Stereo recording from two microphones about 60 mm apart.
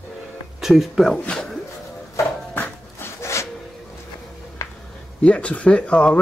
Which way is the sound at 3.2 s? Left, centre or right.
Left.